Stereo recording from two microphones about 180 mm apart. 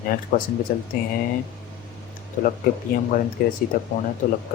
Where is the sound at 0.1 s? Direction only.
50° left (ahead or behind).